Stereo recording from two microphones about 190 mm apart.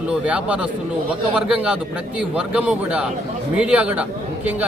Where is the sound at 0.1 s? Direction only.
5° right (ahead or behind).